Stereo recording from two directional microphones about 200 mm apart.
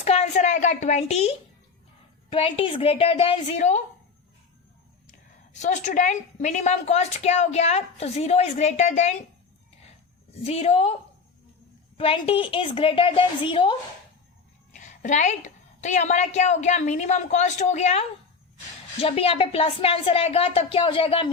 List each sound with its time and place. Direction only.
0.0 s a woman's voice: 35° left (ahead or behind)
5.5 s a woman's voice: 35° left (ahead or behind)
10.4 s a woman's voice: 30° left (ahead or behind)
11.9 s speech: 30° left (ahead or behind)
14.8 s a woman's voice: 35° left (ahead or behind)
19.0 s speech: 30° left (ahead or behind)